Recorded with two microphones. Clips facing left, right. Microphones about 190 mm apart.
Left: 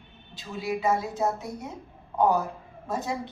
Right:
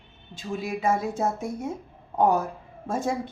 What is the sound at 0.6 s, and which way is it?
Speech, 50° right (ahead or behind).